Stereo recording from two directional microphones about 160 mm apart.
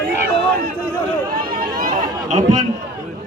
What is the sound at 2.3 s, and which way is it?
Speech, 45° right (ahead or behind).